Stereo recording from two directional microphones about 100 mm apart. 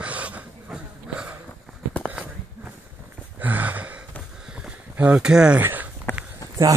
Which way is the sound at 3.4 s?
15° right (ahead or behind).